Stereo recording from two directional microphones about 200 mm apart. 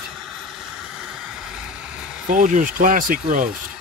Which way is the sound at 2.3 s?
40° right (ahead or behind).